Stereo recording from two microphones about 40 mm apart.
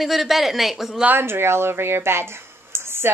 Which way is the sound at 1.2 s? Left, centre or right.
Right.